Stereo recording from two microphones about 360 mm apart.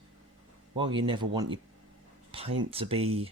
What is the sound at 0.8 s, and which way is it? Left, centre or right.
Speech, centre.